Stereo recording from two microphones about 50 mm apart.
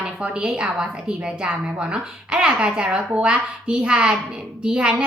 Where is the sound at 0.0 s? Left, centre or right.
Centre.